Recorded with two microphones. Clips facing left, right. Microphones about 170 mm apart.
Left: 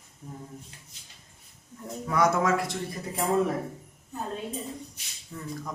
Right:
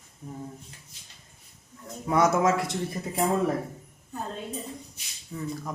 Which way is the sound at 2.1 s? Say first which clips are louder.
Right 2 dB; 25° right (ahead or behind).